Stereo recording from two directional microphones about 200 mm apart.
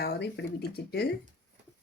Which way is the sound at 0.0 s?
50° left (ahead or behind).